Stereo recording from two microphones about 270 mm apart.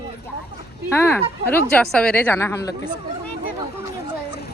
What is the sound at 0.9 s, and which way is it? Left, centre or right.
Speech, centre.